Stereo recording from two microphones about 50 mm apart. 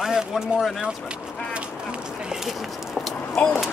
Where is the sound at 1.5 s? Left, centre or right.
Centre.